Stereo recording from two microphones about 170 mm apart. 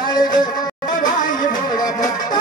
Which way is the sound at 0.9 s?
50° left (ahead or behind).